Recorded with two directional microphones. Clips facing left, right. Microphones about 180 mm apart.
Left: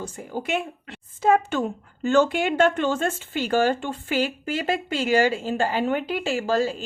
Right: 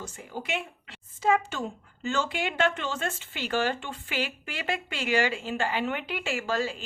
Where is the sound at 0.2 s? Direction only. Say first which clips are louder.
Left 6 dB; 45° left (ahead or behind).